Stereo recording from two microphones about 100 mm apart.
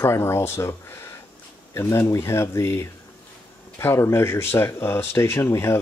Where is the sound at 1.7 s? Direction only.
30° left (ahead or behind).